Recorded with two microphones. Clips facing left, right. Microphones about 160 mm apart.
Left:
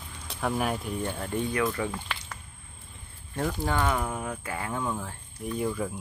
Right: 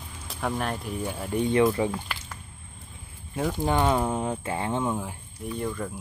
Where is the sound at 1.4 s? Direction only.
25° right (ahead or behind).